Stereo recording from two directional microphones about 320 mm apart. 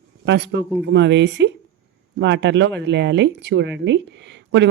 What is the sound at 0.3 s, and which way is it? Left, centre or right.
Speech, right.